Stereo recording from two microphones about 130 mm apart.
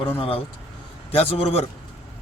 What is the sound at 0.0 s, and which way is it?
A man's voice, 45° left (ahead or behind).